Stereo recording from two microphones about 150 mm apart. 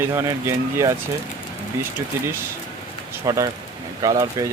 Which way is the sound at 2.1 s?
15° right (ahead or behind).